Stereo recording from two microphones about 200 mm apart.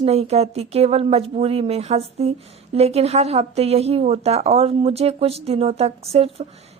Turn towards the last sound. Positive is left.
turn(degrees=-30)  # may be behind; listen again after turning